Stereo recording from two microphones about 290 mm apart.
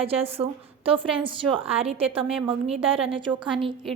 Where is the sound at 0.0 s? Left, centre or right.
Centre.